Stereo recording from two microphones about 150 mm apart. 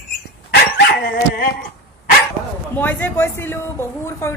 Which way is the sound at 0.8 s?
90° left.